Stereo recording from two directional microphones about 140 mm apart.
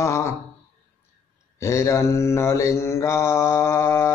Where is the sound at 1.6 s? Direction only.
20° left (ahead or behind).